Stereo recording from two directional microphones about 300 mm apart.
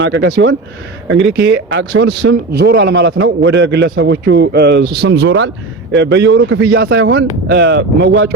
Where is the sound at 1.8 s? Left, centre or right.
Right.